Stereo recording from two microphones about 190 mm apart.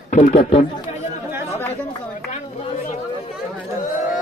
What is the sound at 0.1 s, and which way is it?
Speech, 45° left (ahead or behind).